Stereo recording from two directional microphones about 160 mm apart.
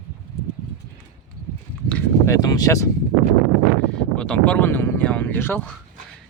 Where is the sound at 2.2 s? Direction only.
20° left (ahead or behind).